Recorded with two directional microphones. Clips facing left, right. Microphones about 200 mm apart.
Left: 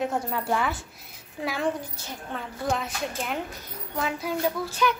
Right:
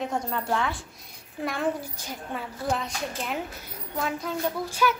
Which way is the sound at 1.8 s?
10° right (ahead or behind).